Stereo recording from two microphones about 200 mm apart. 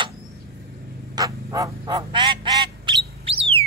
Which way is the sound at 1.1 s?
15° right (ahead or behind).